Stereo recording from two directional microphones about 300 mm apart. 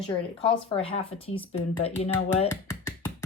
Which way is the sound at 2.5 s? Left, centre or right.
Centre.